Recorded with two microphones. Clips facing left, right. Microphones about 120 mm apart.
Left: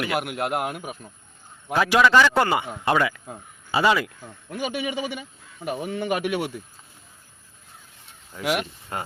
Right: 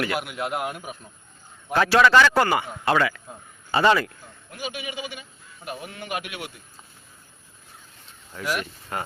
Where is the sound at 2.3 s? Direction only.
20° left (ahead or behind).